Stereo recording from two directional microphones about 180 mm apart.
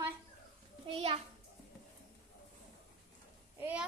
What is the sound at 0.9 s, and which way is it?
Speech, 30° right (ahead or behind).